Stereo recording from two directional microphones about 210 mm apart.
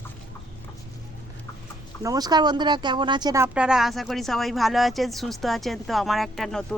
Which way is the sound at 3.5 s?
5° right (ahead or behind).